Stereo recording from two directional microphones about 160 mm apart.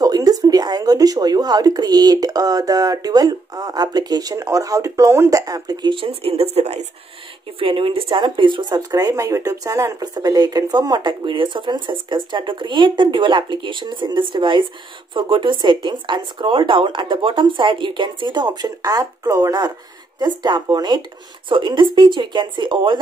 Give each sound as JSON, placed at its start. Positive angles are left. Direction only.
{"t": 0.0, "sound": "speech", "side_deg": -25}